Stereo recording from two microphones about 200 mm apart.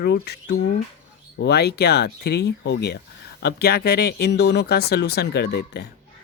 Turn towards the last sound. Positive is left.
turn(degrees=55)  # may be behind; listen again after turning